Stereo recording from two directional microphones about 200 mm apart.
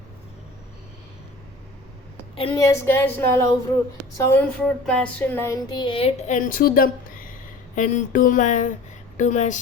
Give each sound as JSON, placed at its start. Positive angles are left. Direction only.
{"t": 2.3, "sound": "child singing", "side_deg": 25}
{"t": 2.6, "sound": "speech", "side_deg": 10}
{"t": 4.2, "sound": "child singing", "side_deg": 10}
{"t": 7.8, "sound": "speech", "side_deg": 40}